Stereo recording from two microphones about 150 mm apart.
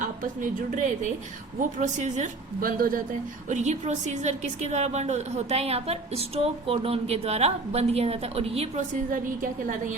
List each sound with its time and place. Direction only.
0.0 s a woman's voice: 55° right (ahead or behind)
2.6 s a woman's voice: 75° right (ahead or behind); by 8.8 s 40° right (ahead or behind)
9.1 s a woman's voice: 60° right (ahead or behind)